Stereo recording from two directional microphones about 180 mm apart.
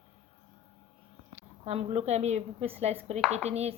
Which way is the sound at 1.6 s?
35° right (ahead or behind).